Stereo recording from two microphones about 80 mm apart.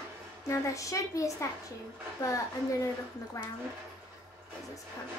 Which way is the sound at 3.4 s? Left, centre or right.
Left.